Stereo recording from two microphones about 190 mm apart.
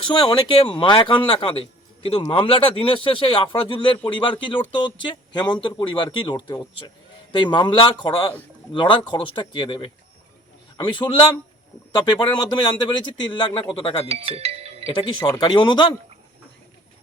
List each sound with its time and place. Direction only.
0.1 s speech: 25° left (ahead or behind)
14.1 s music: 30° right (ahead or behind)
14.9 s speech: 25° left (ahead or behind)